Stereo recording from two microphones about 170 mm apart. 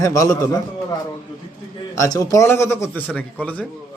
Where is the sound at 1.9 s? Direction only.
20° left (ahead or behind).